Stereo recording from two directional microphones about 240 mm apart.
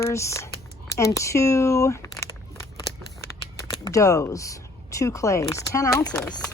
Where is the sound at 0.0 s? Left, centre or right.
Centre.